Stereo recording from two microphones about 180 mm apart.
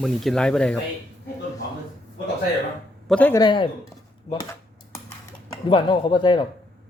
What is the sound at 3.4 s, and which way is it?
Speech, 25° left (ahead or behind).